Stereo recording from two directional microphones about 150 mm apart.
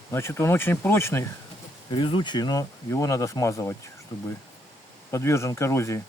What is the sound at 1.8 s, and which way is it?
Speech, 30° left (ahead or behind).